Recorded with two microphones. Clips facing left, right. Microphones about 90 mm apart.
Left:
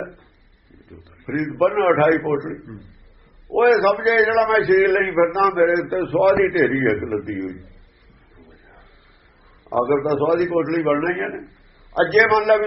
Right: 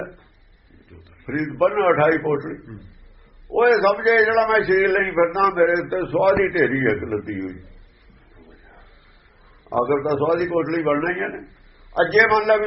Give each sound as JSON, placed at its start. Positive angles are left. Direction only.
{"t": 1.2, "sound": "a man's voice", "side_deg": 0}
{"t": 8.4, "sound": "a sound", "side_deg": -30}
{"t": 9.9, "sound": "a man's voice", "side_deg": 0}